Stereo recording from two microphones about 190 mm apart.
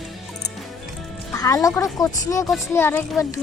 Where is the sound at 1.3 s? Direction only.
15° left (ahead or behind).